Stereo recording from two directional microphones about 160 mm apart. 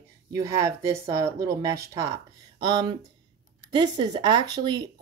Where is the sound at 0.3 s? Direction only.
20° right (ahead or behind).